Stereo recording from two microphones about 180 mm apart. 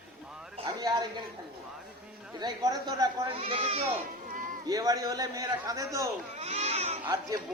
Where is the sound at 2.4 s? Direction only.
20° right (ahead or behind).